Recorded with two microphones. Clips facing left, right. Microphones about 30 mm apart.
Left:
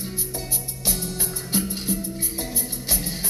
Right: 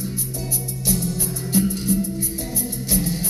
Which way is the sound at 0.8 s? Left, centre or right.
Left.